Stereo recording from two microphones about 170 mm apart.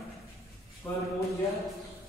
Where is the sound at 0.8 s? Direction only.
15° left (ahead or behind).